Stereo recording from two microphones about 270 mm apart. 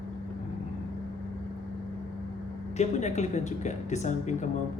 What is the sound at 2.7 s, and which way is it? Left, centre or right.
Speech, left.